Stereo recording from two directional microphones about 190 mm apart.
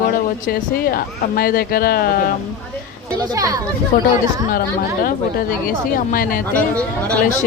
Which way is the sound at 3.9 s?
45° left (ahead or behind).